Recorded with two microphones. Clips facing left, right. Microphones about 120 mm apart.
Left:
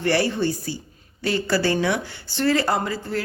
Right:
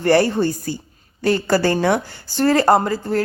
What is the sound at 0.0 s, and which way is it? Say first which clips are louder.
A woman's voice: right 6 dB; 45° right (ahead or behind).